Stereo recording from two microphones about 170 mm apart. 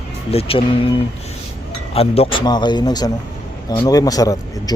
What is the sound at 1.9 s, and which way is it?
Speech, 35° left (ahead or behind).